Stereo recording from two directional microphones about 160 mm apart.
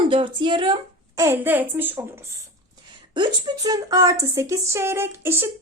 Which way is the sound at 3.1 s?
25° right (ahead or behind).